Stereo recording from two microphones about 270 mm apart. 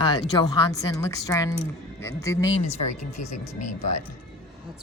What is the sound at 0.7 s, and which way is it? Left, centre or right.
Speech, centre.